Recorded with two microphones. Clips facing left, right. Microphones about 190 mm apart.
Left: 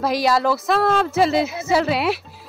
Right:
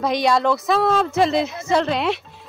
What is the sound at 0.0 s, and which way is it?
Speech, 5° left (ahead or behind).